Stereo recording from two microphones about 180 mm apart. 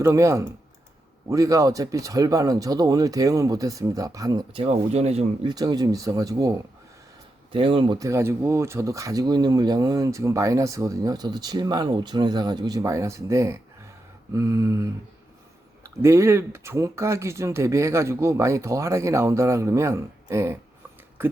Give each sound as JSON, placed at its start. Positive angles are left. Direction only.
{"t": 0.0, "sound": "speech", "side_deg": -15}
{"t": 7.5, "sound": "speech", "side_deg": -30}